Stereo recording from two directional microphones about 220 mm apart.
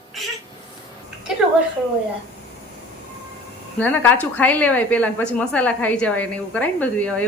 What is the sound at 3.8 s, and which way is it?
A woman's voice, 10° left (ahead or behind).